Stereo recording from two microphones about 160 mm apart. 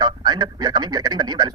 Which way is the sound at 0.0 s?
25° right (ahead or behind).